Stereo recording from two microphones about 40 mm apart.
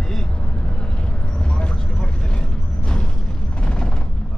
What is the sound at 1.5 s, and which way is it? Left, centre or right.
Vehicle, centre.